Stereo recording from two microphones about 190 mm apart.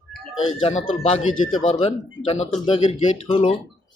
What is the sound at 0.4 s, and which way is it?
Speech, 30° left (ahead or behind).